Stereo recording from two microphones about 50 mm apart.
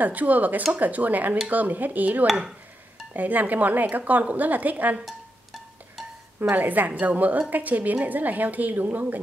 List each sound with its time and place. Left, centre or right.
0.0 s a woman's voice: right
5.0 s music: centre
6.5 s a woman's voice: right